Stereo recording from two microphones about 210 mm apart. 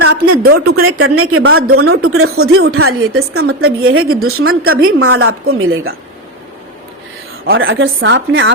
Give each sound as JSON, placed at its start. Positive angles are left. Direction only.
{"t": 0.4, "sound": "speech", "side_deg": -45}
{"t": 0.9, "sound": "a woman's voice", "side_deg": -75}
{"t": 7.5, "sound": "a woman's voice", "side_deg": -70}